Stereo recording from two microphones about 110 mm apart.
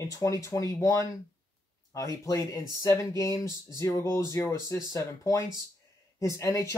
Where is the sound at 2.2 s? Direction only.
30° left (ahead or behind).